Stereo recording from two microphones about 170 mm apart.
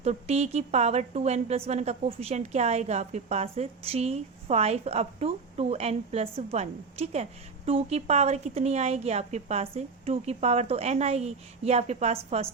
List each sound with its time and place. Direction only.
0.0 s a woman's voice: 40° right (ahead or behind)